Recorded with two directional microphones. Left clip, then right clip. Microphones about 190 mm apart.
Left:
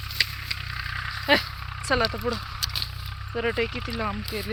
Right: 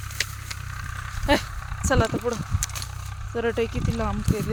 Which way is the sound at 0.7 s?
40° right (ahead or behind).